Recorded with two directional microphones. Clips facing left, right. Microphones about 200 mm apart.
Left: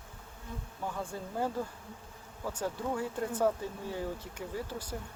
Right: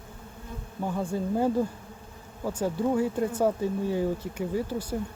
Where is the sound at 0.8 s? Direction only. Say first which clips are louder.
Right 9 dB; 20° right (ahead or behind).